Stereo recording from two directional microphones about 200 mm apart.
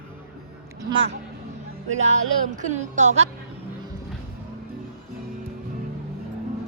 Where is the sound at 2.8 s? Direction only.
35° right (ahead or behind).